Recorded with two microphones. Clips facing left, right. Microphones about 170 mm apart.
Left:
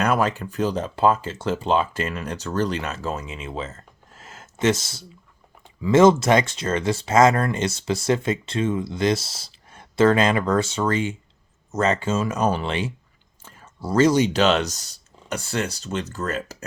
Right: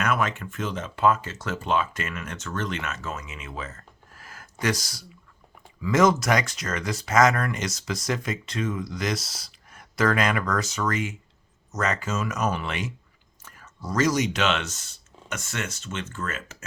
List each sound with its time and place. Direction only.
0.0 s speech: 35° left (ahead or behind)